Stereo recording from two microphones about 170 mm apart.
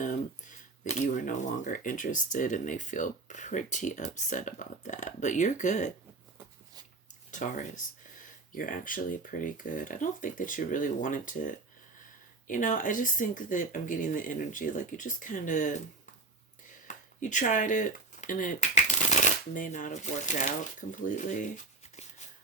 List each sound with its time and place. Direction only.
0.0 s speech: 50° left (ahead or behind)
7.3 s speech: 45° left (ahead or behind)
16.8 s speech: 50° left (ahead or behind)